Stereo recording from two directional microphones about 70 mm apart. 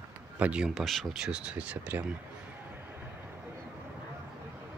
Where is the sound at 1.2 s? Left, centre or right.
Centre.